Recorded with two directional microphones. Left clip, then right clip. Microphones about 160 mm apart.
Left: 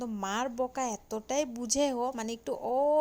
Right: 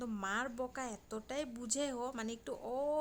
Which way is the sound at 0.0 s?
20° left (ahead or behind).